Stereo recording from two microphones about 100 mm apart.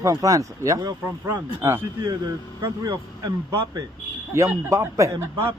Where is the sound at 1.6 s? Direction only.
20° right (ahead or behind).